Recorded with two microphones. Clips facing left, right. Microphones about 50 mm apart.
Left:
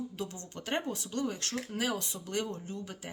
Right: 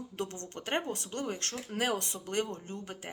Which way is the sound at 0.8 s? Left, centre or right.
Right.